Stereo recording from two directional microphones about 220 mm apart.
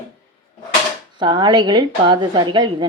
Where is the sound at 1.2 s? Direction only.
20° right (ahead or behind).